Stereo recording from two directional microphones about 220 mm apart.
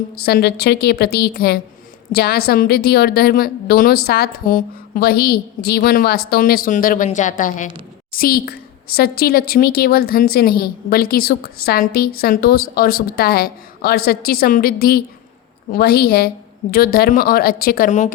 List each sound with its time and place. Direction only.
0.2 s a woman's voice: 45° left (ahead or behind)